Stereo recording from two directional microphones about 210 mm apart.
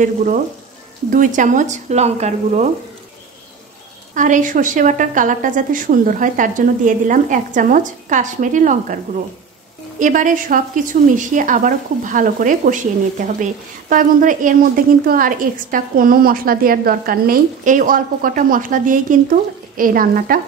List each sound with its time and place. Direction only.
0.0 s a woman's voice: 40° right (ahead or behind)
4.1 s a woman's voice: 40° right (ahead or behind)